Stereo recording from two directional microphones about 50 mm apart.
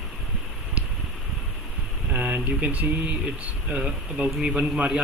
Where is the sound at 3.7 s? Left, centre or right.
Right.